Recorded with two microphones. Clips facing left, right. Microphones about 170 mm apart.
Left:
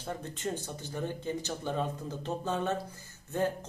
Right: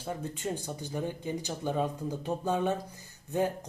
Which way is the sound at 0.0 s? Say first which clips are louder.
Right 1 dB; 10° right (ahead or behind).